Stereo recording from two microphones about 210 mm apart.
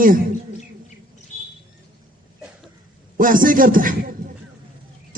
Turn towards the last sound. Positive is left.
turn(degrees=-40)  # may be behind; listen again after turning